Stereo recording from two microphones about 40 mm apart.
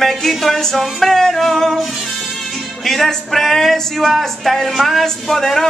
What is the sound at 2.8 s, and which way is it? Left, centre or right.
Speech, centre.